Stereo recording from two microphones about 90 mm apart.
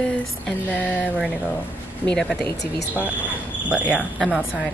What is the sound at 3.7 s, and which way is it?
Speech, 10° right (ahead or behind).